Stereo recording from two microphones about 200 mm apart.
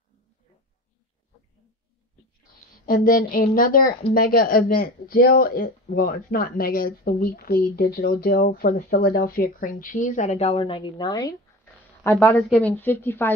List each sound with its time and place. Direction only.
2.7 s a woman's voice: 45° left (ahead or behind); by 13.3 s 10° left (ahead or behind)